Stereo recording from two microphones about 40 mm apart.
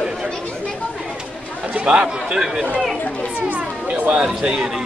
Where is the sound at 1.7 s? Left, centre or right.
Right.